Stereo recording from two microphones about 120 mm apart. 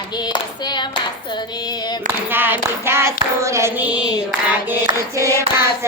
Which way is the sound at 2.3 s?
15° right (ahead or behind).